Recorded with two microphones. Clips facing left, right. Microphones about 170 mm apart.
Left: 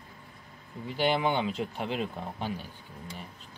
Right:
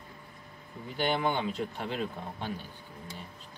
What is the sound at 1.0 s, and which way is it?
Speech, 5° left (ahead or behind).